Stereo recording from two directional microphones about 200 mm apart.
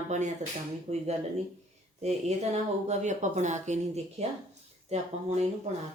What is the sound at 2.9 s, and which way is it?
Speech, 35° right (ahead or behind).